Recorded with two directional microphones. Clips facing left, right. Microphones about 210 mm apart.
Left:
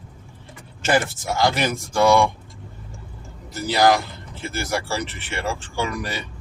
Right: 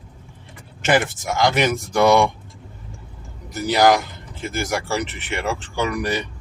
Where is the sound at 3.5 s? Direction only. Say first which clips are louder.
Right 2 dB; 15° right (ahead or behind).